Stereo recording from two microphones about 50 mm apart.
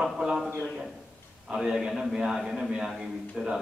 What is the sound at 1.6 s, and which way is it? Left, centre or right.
A man's voice, centre.